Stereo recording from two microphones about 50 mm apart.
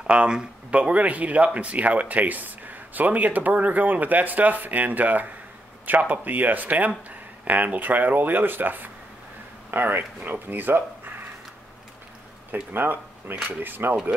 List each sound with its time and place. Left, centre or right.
0.0 s speech: right
12.7 s speech: right